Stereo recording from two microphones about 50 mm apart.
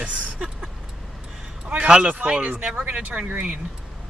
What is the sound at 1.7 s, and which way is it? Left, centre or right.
Speech, right.